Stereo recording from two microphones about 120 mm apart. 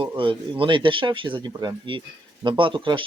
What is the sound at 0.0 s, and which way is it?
Speech, 45° right (ahead or behind).